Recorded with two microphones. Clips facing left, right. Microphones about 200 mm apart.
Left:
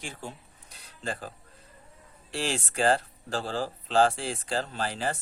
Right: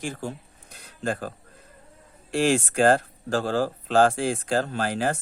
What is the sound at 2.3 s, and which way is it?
Speech, 50° right (ahead or behind).